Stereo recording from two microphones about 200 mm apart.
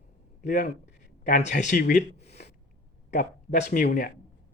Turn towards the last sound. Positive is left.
turn(degrees=45)  # may be behind; listen again after turning